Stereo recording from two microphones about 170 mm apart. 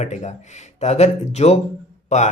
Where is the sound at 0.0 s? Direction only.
40° left (ahead or behind).